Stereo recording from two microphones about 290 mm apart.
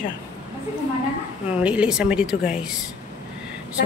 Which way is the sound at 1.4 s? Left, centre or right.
Centre.